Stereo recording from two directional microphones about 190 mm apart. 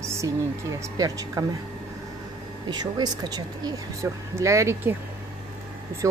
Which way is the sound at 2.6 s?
20° right (ahead or behind).